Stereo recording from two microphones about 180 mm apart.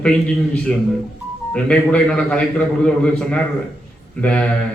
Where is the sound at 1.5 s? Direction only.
5° left (ahead or behind).